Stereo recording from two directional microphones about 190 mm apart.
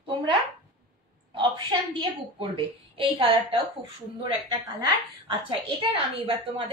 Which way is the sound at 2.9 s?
25° right (ahead or behind).